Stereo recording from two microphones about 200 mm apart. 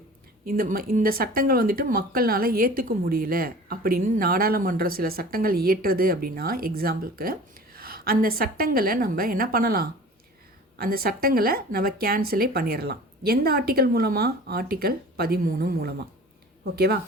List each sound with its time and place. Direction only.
0.4 s speech: 45° right (ahead or behind)